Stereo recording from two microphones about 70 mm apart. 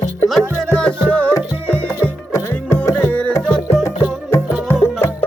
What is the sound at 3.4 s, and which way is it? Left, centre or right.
Music, centre.